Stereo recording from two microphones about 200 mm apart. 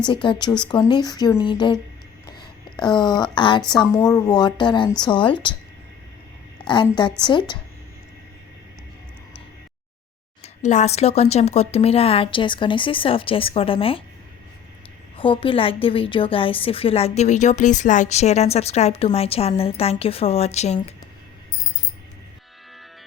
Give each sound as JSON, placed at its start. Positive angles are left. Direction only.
{"t": 0.0, "sound": "speech", "side_deg": 25}
{"t": 6.7, "sound": "speech", "side_deg": 20}
{"t": 10.4, "sound": "speech", "side_deg": 35}
{"t": 15.2, "sound": "a woman's voice", "side_deg": 25}